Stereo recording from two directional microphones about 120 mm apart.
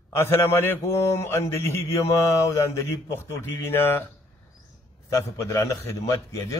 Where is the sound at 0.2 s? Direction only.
20° left (ahead or behind).